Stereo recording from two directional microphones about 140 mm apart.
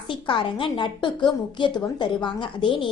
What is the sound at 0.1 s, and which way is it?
A woman's voice, 35° left (ahead or behind).